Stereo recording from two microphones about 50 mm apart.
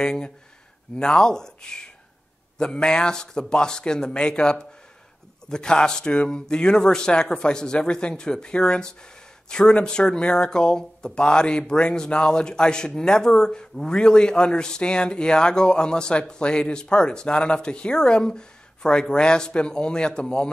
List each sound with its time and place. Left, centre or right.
0.0 s speech: centre